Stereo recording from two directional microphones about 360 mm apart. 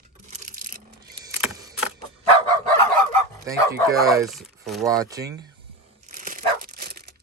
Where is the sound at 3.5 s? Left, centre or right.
Centre.